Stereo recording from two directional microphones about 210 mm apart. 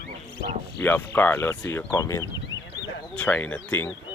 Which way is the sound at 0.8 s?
10° left (ahead or behind).